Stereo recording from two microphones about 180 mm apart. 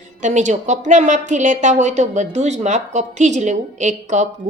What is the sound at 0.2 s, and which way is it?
A woman's voice, 40° right (ahead or behind).